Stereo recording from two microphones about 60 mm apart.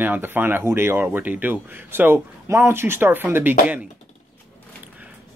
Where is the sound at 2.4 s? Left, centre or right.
Right.